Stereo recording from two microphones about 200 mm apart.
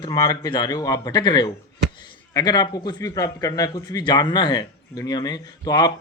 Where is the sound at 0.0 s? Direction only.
20° left (ahead or behind).